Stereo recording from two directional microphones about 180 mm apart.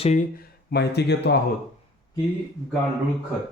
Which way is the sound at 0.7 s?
65° left (ahead or behind).